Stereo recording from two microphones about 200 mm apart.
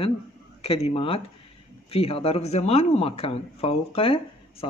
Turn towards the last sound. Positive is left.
turn(degrees=30)  # may be behind; listen again after turning